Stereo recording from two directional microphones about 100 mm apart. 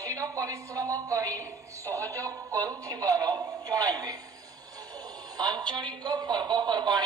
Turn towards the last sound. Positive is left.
turn(degrees=-45)  # may be behind; listen again after turning